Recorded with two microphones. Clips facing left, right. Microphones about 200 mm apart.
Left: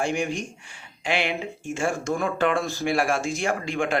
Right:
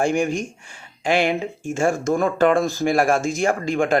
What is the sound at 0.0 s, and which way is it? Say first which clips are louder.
Speech: right 6 dB; 45° right (ahead or behind).